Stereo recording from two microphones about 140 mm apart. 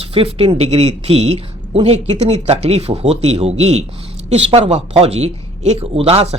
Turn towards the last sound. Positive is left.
turn(degrees=-45)  # may be behind; listen again after turning